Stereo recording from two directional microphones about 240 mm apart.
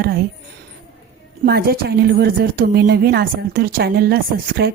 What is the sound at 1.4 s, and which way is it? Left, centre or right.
A woman's voice, right.